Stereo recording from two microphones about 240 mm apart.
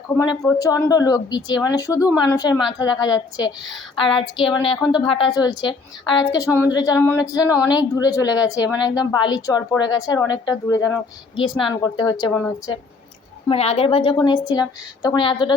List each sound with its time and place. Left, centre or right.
0.2 s a woman's voice: centre
13.5 s a woman's voice: left